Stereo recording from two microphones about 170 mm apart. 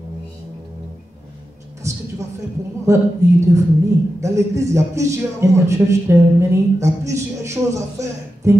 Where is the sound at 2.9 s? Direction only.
15° right (ahead or behind).